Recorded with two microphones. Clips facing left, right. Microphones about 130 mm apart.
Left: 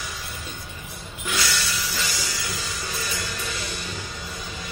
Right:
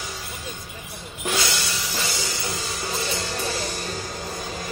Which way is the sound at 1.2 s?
30° right (ahead or behind).